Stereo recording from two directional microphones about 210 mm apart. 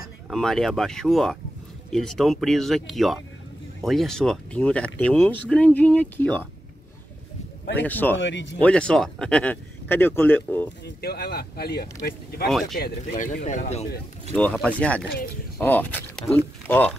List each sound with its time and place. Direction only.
0.3 s speech: centre (ahead or behind)
7.7 s speech: 10° left (ahead or behind)
8.2 s speech: 60° left (ahead or behind)
8.5 s speech: 5° left (ahead or behind)
11.0 s speech: 50° left (ahead or behind)
12.4 s speech: centre (ahead or behind)
12.7 s speech: 45° left (ahead or behind)
14.3 s speech: 5° left (ahead or behind)